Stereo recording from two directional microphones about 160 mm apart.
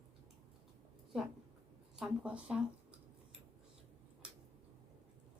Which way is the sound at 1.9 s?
5° right (ahead or behind).